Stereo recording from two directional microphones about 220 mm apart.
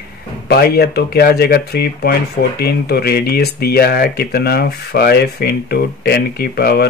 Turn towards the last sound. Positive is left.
turn(degrees=45)  # may be behind; listen again after turning